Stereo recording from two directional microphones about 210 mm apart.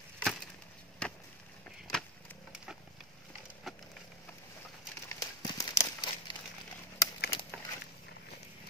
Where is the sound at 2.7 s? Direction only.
5° right (ahead or behind).